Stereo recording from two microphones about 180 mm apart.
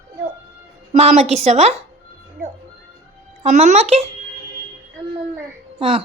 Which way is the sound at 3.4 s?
40° right (ahead or behind).